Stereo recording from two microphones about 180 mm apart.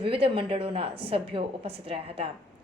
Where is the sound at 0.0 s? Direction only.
30° right (ahead or behind).